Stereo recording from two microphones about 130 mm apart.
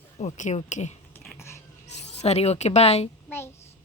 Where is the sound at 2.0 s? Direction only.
55° left (ahead or behind).